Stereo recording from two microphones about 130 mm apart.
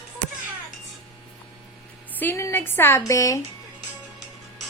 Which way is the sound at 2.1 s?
15° left (ahead or behind).